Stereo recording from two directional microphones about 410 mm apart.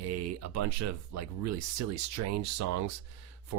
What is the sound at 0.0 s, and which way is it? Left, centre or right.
Speech, right.